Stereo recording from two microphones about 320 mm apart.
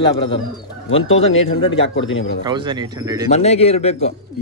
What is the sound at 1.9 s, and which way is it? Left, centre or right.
Speech, left.